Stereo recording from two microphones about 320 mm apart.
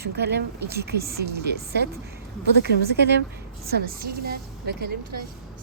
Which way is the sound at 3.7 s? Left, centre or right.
Right.